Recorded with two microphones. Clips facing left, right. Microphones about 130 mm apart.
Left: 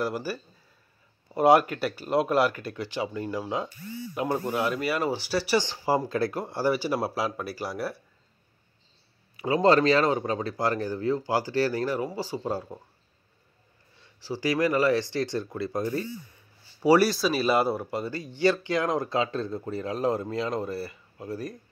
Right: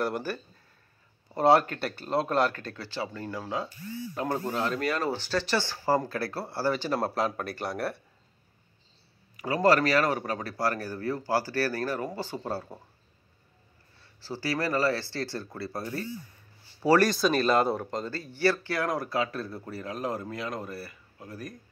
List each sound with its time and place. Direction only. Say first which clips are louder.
0.0 s speech: left 1 dB; 5° left (ahead or behind)
9.4 s speech: left 2 dB; 25° left (ahead or behind)
14.0 s speech: left 5 dB; 15° left (ahead or behind)